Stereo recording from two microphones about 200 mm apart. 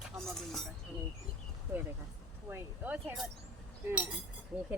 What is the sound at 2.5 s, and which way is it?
Speech, 5° right (ahead or behind).